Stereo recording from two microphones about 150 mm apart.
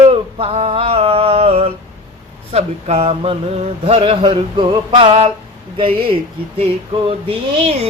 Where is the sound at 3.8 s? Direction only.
40° right (ahead or behind).